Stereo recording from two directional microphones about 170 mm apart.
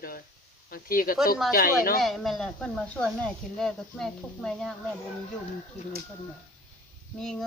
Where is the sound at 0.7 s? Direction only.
60° left (ahead or behind).